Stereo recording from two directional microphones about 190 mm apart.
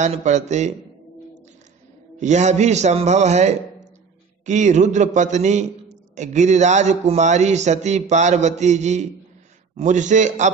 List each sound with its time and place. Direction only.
0.0 s a man's voice: 40° right (ahead or behind)
2.1 s a man's voice: 40° right (ahead or behind)